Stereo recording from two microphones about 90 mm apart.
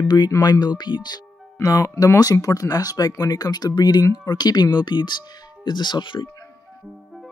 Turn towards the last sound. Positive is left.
turn(degrees=65)  # may be behind; listen again after turning